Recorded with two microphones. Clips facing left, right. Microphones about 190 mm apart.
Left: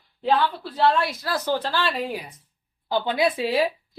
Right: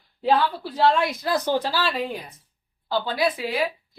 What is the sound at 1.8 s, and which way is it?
Speech, centre (ahead or behind).